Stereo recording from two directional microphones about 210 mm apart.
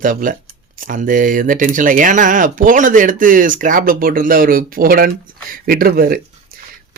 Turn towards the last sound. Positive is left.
turn(degrees=-45)  # may be behind; listen again after turning